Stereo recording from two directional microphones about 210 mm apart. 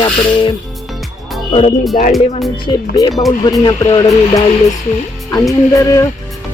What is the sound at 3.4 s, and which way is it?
Speech, 15° left (ahead or behind).